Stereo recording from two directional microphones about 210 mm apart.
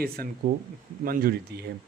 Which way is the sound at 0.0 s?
45° right (ahead or behind).